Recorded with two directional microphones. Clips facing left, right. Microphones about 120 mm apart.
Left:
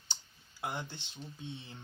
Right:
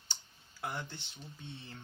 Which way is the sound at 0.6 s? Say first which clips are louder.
Left 1 dB; 20° left (ahead or behind).